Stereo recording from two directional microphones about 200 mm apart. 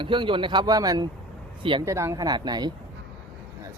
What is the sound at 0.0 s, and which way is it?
Speech, 25° right (ahead or behind).